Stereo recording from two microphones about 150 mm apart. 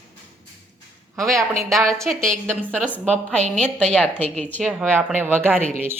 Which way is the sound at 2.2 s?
60° right (ahead or behind).